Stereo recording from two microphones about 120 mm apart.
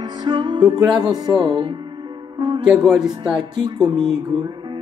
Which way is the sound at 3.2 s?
35° right (ahead or behind).